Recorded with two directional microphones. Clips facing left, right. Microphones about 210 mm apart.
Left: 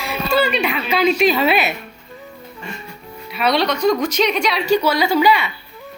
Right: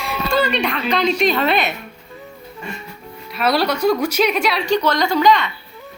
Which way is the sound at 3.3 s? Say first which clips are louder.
Even; 5° right (ahead or behind).